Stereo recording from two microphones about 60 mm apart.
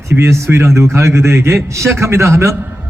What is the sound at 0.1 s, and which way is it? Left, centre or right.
A man's voice, right.